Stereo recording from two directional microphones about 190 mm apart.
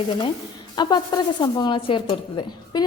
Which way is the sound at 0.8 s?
20° left (ahead or behind).